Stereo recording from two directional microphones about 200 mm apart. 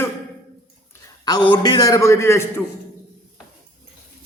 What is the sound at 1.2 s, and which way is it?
A man's voice, 20° left (ahead or behind).